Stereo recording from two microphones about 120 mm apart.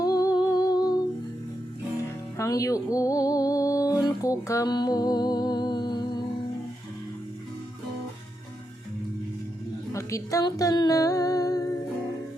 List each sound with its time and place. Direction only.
0.0 s music: 30° left (ahead or behind)
0.3 s humming: 30° left (ahead or behind)
2.4 s music: 25° left (ahead or behind)
9.9 s speech: 25° left (ahead or behind)